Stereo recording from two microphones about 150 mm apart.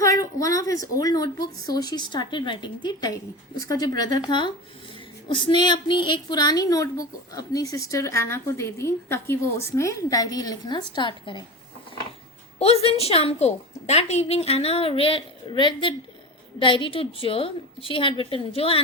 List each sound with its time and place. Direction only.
0.0 s a woman's voice: 20° left (ahead or behind)
12.5 s a woman's voice: 40° left (ahead or behind)